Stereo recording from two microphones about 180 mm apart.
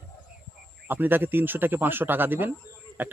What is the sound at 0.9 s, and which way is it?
Speech, 10° right (ahead or behind).